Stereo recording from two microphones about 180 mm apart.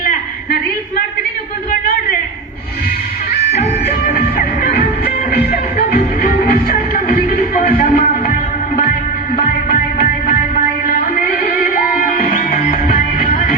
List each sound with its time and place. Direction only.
4.6 s music: 60° left (ahead or behind)
9.6 s music: 55° left (ahead or behind)